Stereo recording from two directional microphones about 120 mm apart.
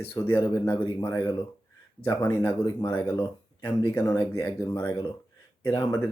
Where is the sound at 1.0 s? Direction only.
30° left (ahead or behind).